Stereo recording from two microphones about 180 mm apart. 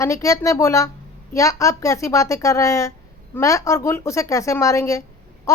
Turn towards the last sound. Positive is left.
turn(degrees=15)  # may be behind; listen again after turning